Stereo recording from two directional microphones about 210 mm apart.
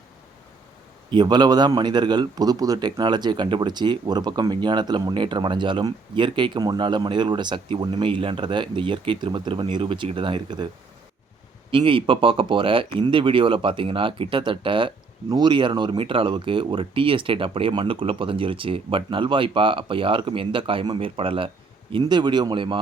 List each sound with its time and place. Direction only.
1.1 s speech: 20° right (ahead or behind)
11.7 s speech: 25° right (ahead or behind)